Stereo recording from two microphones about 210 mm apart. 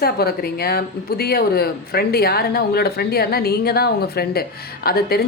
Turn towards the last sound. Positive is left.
turn(degrees=45)  # may be behind; listen again after turning